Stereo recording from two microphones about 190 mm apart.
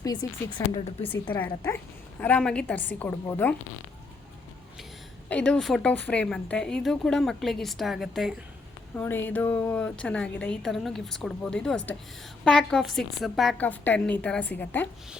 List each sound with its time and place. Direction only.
0.0 s speech: 20° left (ahead or behind)
1.0 s a woman's voice: 10° left (ahead or behind)
5.3 s a woman's voice: 5° left (ahead or behind)
9.0 s a woman's voice: 10° left (ahead or behind)